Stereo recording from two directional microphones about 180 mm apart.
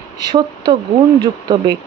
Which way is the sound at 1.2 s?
20° right (ahead or behind).